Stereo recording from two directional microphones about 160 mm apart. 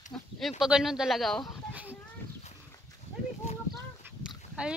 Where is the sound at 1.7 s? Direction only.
10° right (ahead or behind).